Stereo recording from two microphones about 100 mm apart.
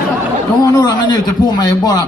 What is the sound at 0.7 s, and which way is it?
A man's voice, 40° left (ahead or behind).